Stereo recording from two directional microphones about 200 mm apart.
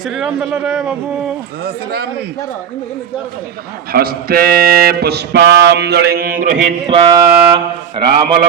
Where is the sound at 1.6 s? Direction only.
50° right (ahead or behind).